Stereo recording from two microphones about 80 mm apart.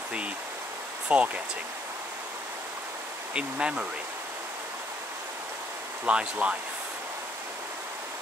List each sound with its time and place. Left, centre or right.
1.0 s speech: centre
3.3 s speech: centre
6.0 s speech: centre